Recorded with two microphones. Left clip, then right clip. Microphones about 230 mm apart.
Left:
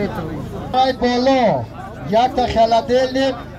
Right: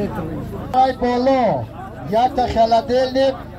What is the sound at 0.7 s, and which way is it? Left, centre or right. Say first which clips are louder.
A man's voice: even; left.